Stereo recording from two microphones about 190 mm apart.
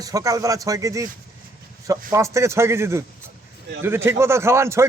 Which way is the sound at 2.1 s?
15° right (ahead or behind).